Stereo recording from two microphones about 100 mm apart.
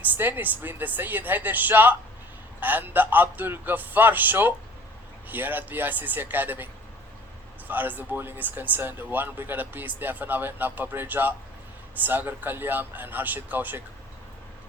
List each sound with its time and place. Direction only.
0.0 s a man's voice: 20° right (ahead or behind)
7.7 s speech: 20° right (ahead or behind)